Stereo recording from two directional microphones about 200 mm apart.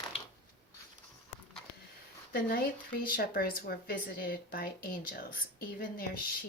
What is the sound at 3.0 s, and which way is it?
Speech, 45° left (ahead or behind).